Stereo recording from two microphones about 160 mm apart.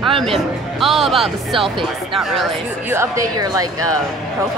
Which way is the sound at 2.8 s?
15° right (ahead or behind).